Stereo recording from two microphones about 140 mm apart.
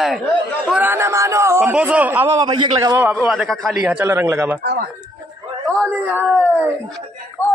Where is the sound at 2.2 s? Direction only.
30° right (ahead or behind).